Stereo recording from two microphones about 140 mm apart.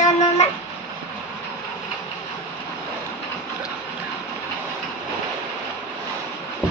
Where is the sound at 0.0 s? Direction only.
50° left (ahead or behind).